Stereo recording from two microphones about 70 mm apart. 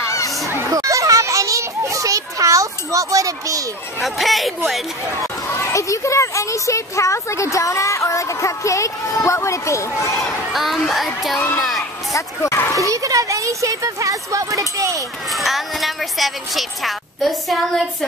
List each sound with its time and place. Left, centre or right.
0.0 s a sound: left
0.7 s children playing: right
4.0 s a woman's voice: centre
5.5 s speech: left
10.2 s a woman's voice: centre
12.1 s speech: left
12.7 s speech: right
15.3 s a woman's voice: centre